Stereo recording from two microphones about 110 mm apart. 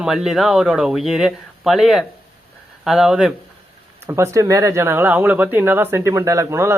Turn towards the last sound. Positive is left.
turn(degrees=-25)  # may be behind; listen again after turning